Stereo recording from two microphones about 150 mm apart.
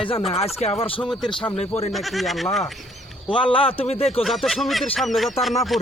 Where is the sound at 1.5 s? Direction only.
45° left (ahead or behind).